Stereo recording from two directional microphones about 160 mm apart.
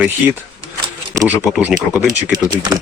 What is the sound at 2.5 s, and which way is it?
Speech, 25° right (ahead or behind).